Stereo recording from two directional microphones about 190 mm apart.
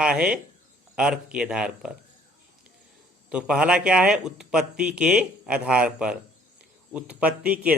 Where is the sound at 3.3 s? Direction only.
5° right (ahead or behind).